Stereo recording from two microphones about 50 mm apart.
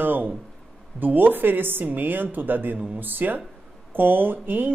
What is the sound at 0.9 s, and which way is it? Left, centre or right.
A woman's voice, right.